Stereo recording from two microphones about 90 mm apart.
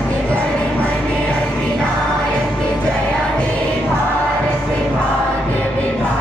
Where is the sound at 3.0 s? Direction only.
10° left (ahead or behind).